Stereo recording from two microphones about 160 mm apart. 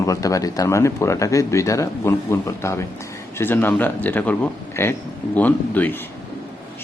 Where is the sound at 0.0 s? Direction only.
20° left (ahead or behind).